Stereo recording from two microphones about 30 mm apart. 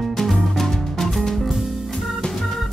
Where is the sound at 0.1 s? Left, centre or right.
Centre.